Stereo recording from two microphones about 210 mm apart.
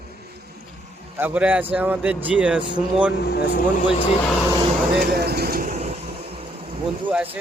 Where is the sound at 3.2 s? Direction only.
45° left (ahead or behind).